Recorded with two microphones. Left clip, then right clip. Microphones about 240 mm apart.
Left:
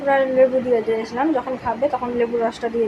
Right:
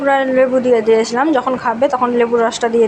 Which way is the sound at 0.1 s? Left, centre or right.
Centre.